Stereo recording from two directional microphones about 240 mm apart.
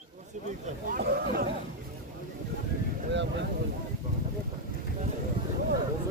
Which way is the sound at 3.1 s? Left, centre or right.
Right.